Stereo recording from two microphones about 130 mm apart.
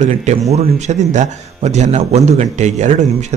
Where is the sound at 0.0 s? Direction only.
60° right (ahead or behind).